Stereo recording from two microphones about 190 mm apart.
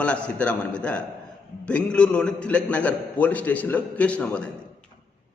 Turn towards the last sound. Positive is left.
turn(degrees=5)  # may be behind; listen again after turning